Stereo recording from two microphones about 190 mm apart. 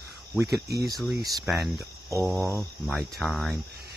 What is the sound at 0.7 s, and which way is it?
Speech, 55° right (ahead or behind).